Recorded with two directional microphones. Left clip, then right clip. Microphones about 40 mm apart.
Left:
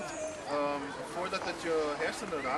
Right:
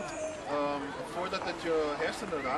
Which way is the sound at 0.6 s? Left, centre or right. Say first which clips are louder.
Even; centre.